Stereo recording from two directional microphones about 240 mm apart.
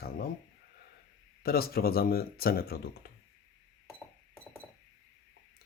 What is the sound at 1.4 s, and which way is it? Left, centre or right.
Speech, left.